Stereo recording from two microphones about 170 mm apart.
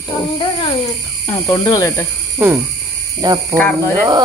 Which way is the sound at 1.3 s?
20° left (ahead or behind).